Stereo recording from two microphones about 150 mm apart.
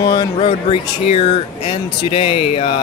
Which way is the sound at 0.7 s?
40° left (ahead or behind).